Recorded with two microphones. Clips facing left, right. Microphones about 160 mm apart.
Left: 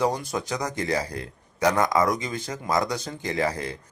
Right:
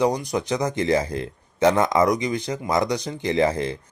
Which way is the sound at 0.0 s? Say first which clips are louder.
Right 4 dB; 15° right (ahead or behind).